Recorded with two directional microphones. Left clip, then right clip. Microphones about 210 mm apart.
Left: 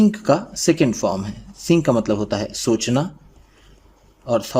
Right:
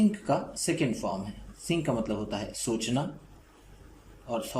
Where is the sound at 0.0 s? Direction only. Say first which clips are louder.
Left 10 dB; 55° left (ahead or behind).